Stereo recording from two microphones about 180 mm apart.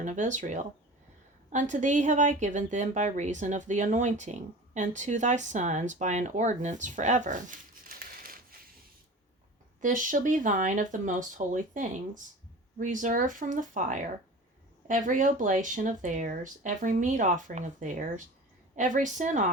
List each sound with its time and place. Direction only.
0.0 s a woman's voice: 45° right (ahead or behind)
9.8 s a woman's voice: 45° right (ahead or behind)